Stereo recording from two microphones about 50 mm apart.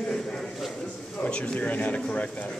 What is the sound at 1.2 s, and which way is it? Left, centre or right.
Speech, left.